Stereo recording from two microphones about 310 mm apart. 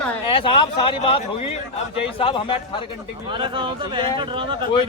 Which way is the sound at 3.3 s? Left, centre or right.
Centre.